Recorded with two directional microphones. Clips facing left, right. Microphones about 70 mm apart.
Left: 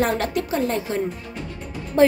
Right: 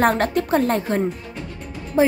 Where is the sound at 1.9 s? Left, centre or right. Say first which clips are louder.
Left 1 dB; centre.